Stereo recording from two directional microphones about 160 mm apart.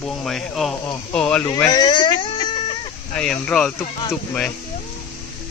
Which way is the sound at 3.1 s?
5° left (ahead or behind).